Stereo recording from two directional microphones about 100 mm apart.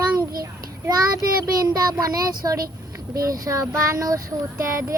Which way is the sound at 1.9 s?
40° right (ahead or behind).